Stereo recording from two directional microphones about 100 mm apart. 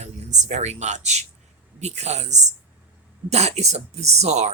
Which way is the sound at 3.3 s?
90° right.